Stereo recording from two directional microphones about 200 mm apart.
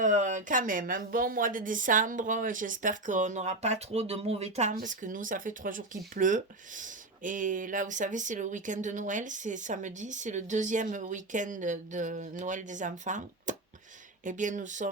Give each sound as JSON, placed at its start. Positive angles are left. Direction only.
{"t": 0.0, "sound": "speech", "side_deg": -40}